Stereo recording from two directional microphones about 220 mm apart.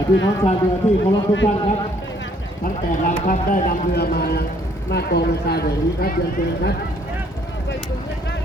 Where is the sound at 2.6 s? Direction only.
40° left (ahead or behind).